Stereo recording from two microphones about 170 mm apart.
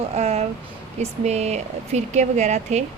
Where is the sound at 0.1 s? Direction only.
40° right (ahead or behind).